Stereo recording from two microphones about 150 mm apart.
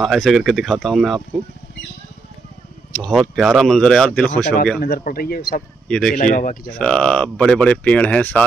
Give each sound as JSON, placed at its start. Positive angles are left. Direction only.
{"t": 0.0, "sound": "speech", "side_deg": 0}
{"t": 3.0, "sound": "speech", "side_deg": 0}
{"t": 4.7, "sound": "speech", "side_deg": 85}
{"t": 5.9, "sound": "speech", "side_deg": 5}
{"t": 6.1, "sound": "speech", "side_deg": 60}
{"t": 6.7, "sound": "speech", "side_deg": 5}